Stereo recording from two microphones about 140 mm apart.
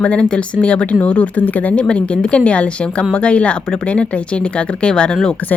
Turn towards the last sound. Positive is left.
turn(degrees=10)  # may be behind; listen again after turning